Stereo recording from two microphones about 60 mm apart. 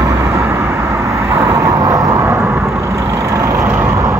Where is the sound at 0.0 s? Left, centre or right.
Right.